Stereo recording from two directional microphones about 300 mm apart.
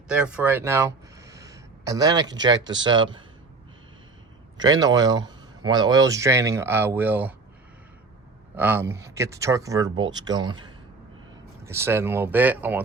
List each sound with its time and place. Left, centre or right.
0.1 s speech: centre
4.5 s speech: centre
8.5 s speech: centre